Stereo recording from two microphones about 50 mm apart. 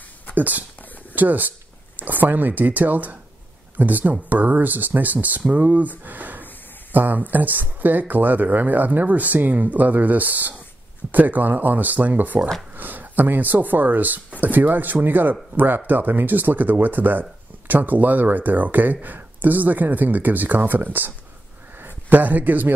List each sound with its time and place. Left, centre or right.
0.4 s a man's voice: right